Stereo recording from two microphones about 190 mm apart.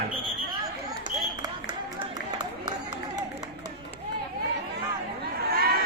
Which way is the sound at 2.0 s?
25° right (ahead or behind).